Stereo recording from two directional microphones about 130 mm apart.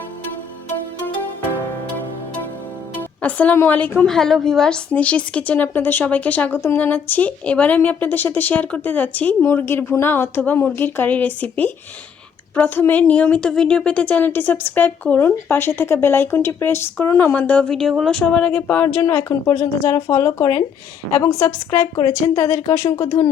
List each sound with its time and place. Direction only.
3.0 s a woman's voice: 10° left (ahead or behind)
4.1 s a woman's voice: centre (ahead or behind); by 23.0 s 20° left (ahead or behind)